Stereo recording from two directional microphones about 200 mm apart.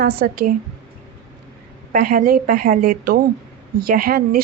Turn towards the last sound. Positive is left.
turn(degrees=-45)  # may be behind; listen again after turning